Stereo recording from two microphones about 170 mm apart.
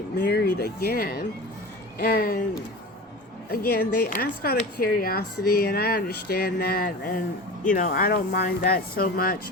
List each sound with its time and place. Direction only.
0.2 s speech: 65° left (ahead or behind)
3.5 s speech: 65° left (ahead or behind)